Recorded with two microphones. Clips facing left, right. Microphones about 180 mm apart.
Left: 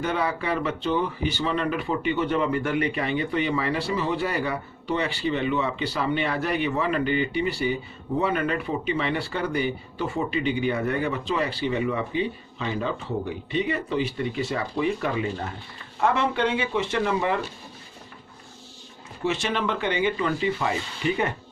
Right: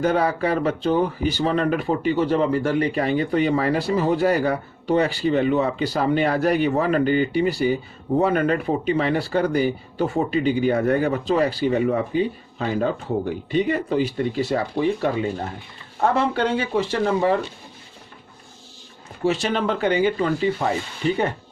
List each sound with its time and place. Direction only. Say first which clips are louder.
0.0 s speech: right 6 dB; 40° right (ahead or behind)
19.2 s speech: right 4 dB; 35° right (ahead or behind)